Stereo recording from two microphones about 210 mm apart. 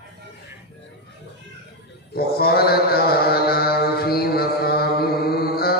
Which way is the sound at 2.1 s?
45° left (ahead or behind).